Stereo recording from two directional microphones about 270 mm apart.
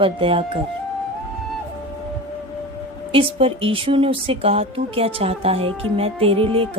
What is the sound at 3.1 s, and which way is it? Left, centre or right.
Speech, centre.